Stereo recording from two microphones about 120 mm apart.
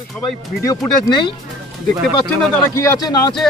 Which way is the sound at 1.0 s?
40° left (ahead or behind).